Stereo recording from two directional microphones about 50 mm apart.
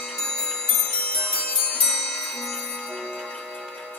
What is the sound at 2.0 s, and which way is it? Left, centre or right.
Music, centre.